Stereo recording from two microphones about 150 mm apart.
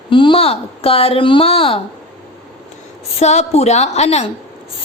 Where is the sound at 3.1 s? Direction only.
45° left (ahead or behind).